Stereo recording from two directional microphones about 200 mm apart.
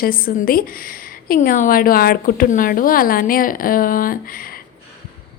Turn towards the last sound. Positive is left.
turn(degrees=45)  # may be behind; listen again after turning